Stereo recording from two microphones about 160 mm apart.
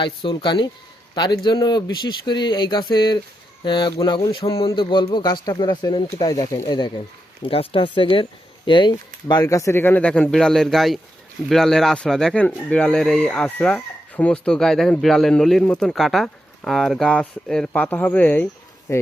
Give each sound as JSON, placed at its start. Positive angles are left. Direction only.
{"t": 0.0, "sound": "speech", "side_deg": 30}